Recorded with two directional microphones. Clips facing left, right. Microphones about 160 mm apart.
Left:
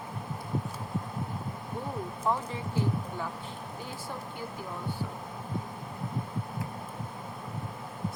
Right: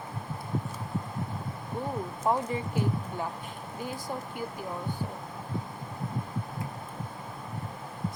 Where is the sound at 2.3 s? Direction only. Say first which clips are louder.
Right 3 dB; 15° right (ahead or behind).